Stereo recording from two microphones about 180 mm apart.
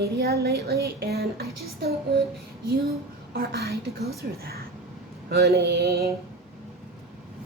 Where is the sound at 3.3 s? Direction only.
60° right (ahead or behind).